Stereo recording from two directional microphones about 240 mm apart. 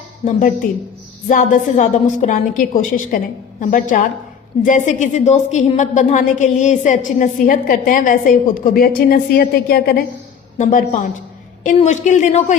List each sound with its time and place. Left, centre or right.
0.3 s a woman's voice: left